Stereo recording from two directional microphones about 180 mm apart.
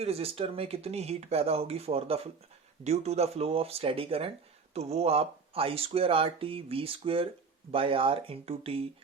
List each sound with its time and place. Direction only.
0.0 s speech: 35° right (ahead or behind)